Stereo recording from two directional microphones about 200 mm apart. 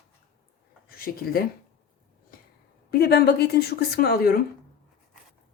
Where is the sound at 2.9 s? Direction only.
55° left (ahead or behind).